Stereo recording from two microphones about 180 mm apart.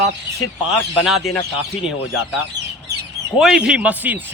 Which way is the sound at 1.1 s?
Centre (ahead or behind).